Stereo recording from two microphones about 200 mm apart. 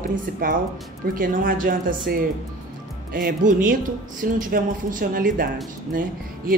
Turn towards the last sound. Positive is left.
turn(degrees=-45)  # may be behind; listen again after turning